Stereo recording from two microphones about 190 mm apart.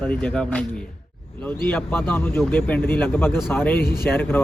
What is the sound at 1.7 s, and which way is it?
Speech, 10° left (ahead or behind).